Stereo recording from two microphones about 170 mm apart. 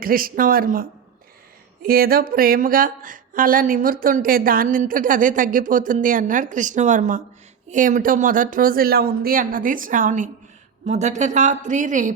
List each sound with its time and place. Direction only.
0.0 s speech: 55° right (ahead or behind)